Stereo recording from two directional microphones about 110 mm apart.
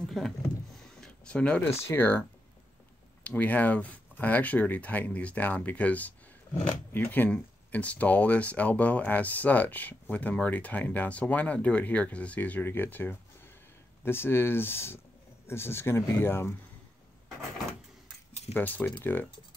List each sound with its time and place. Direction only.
0.2 s speech: centre (ahead or behind)
0.7 s a sound: 5° left (ahead or behind)
1.9 s speech: 20° left (ahead or behind)
3.3 s speech: 15° left (ahead or behind)
18.5 s speech: 15° left (ahead or behind)